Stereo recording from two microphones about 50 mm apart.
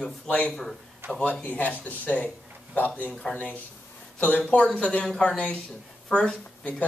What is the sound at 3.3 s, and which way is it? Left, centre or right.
Speech, centre.